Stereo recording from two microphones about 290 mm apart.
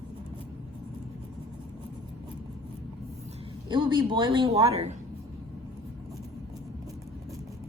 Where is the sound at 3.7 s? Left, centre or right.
Centre.